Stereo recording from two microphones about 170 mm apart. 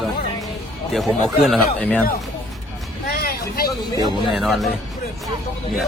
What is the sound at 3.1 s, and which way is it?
Vehicle, 60° left (ahead or behind).